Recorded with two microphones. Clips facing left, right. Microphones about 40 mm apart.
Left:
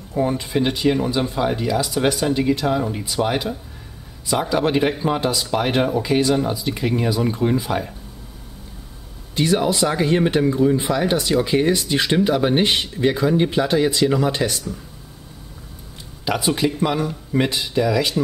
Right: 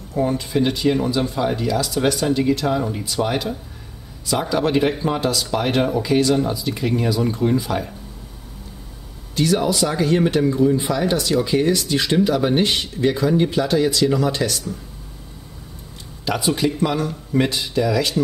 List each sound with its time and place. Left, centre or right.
0.1 s speech: centre
9.3 s speech: left
16.3 s speech: centre